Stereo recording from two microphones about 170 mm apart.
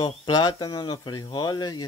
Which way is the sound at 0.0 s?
25° left (ahead or behind).